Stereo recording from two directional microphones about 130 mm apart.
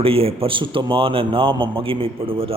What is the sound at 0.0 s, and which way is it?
A man's voice, 50° right (ahead or behind).